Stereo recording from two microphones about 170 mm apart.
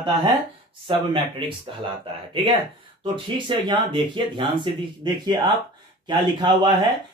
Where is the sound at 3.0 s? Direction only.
25° right (ahead or behind).